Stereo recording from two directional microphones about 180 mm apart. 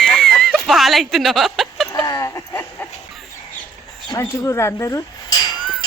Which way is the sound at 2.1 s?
20° left (ahead or behind).